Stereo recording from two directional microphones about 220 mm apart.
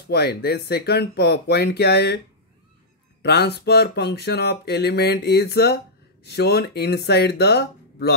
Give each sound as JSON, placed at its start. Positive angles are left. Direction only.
{"t": 0.1, "sound": "speech", "side_deg": 50}
{"t": 3.2, "sound": "speech", "side_deg": 50}